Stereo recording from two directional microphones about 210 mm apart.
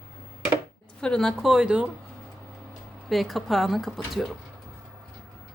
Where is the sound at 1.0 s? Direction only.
5° left (ahead or behind).